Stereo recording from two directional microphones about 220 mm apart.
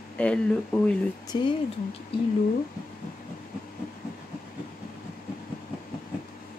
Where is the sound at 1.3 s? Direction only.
20° left (ahead or behind).